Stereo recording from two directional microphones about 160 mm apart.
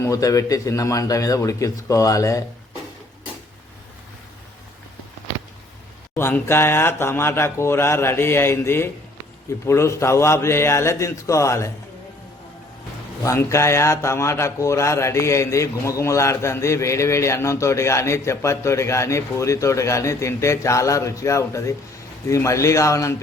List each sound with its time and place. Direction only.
0.0 s a man's voice: 20° left (ahead or behind)
6.1 s a man's voice: 15° left (ahead or behind)
13.2 s a man's voice: 20° left (ahead or behind)